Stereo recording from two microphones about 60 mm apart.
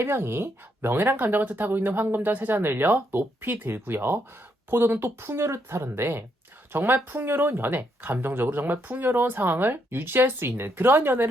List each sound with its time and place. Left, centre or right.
0.0 s speech: right